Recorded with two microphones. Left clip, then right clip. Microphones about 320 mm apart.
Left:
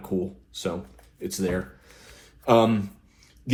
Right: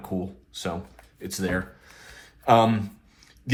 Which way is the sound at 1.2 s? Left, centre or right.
Right.